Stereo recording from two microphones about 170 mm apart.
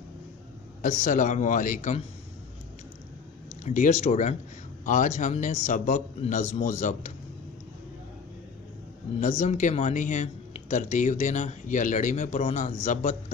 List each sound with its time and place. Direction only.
0.8 s speech: 50° left (ahead or behind)
3.6 s speech: 45° left (ahead or behind)
9.2 s speech: 45° left (ahead or behind)